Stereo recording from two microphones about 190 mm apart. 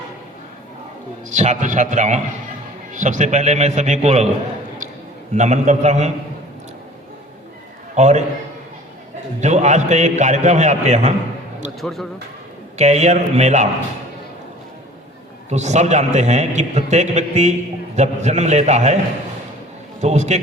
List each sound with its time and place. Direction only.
1.3 s a man's voice: 40° right (ahead or behind)
5.3 s a man's voice: 40° right (ahead or behind)
7.9 s a man's voice: 35° right (ahead or behind)
9.4 s a man's voice: 40° right (ahead or behind)
11.8 s speech: centre (ahead or behind)
12.7 s a man's voice: 35° right (ahead or behind)
15.4 s a man's voice: 35° right (ahead or behind)
20.0 s a man's voice: 35° right (ahead or behind)